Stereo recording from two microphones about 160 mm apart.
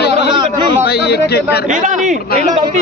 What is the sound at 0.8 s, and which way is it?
Speech, 85° left.